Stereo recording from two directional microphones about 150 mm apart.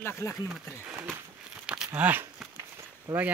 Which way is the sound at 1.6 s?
5° right (ahead or behind).